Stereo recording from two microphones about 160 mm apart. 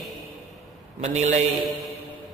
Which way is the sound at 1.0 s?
45° right (ahead or behind).